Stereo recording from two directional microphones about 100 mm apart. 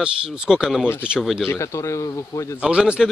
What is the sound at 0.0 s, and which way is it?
Speech, 5° right (ahead or behind).